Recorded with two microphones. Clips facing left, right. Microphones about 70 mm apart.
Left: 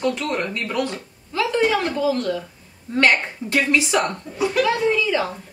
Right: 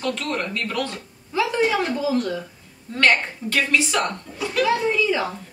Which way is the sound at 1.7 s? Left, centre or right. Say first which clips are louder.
Left 1 dB; centre.